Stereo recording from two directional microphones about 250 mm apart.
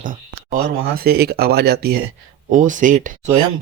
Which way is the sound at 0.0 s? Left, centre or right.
Right.